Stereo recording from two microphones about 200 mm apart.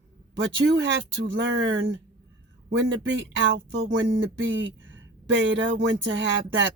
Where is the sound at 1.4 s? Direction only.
70° right (ahead or behind).